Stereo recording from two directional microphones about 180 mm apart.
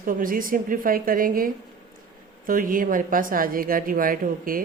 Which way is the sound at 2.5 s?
50° right (ahead or behind).